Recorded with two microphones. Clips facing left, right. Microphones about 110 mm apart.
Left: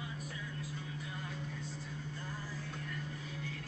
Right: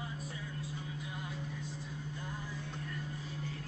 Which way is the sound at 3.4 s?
35° right (ahead or behind).